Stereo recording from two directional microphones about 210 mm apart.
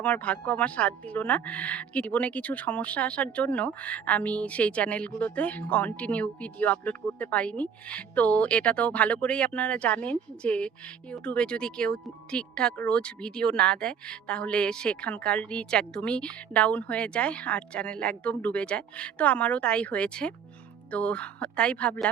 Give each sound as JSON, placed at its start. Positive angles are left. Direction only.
{"t": 0.0, "sound": "speech", "side_deg": 5}